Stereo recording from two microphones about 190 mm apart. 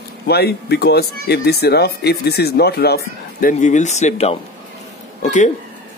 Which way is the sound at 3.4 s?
40° left (ahead or behind).